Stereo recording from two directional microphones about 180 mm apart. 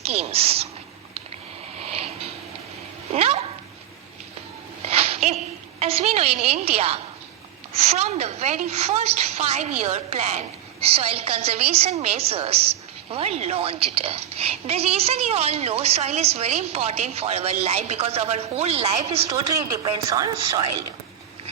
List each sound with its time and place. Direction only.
0.0 s a woman's voice: 35° right (ahead or behind)
1.8 s a sound: 35° right (ahead or behind)
3.1 s a woman's voice: 35° right (ahead or behind)
4.9 s a sound: 35° right (ahead or behind)
5.8 s a woman's voice: 35° right (ahead or behind)
19.3 s a woman's voice: 20° right (ahead or behind)